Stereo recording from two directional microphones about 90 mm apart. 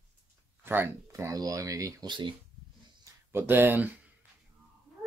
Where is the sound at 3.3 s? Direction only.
25° right (ahead or behind).